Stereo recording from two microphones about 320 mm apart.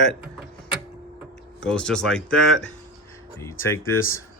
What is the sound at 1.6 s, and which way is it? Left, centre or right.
Speech, centre.